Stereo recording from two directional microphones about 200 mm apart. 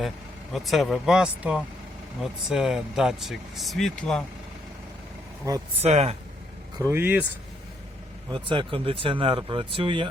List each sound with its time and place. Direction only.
0.5 s speech: centre (ahead or behind)
5.5 s speech: 15° right (ahead or behind)
5.8 s speech: 30° right (ahead or behind)
6.9 s speech: 10° right (ahead or behind)
8.3 s speech: 25° right (ahead or behind)